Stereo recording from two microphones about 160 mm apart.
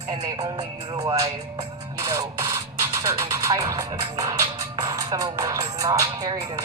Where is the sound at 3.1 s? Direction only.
20° right (ahead or behind).